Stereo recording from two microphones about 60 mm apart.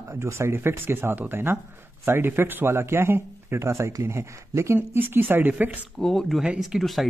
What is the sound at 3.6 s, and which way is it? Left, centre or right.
Speech, right.